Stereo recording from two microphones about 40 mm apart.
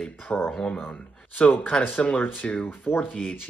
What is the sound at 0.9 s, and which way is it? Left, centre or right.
Speech, left.